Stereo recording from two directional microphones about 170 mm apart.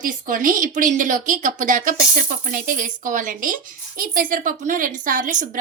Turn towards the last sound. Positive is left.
turn(degrees=-50)  # may be behind; listen again after turning